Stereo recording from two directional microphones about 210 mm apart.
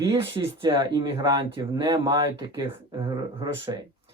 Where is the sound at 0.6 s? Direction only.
20° right (ahead or behind).